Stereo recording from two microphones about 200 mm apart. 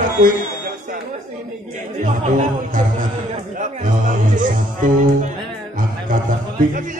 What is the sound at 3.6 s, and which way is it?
Speech, 40° right (ahead or behind).